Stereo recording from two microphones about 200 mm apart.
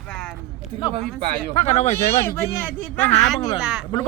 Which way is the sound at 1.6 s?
30° left (ahead or behind).